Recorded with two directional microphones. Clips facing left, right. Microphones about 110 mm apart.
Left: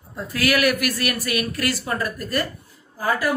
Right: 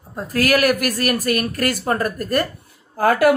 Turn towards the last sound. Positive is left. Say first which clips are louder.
# right 8 dB
turn(degrees=-65)  # may be behind; listen again after turning